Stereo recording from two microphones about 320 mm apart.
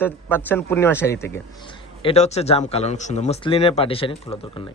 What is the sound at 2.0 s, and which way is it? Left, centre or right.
A man's voice, centre.